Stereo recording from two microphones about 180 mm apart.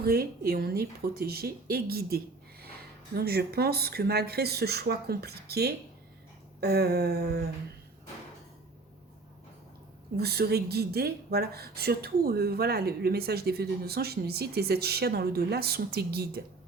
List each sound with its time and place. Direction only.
0.0 s speech: 60° right (ahead or behind)
10.2 s speech: 60° right (ahead or behind)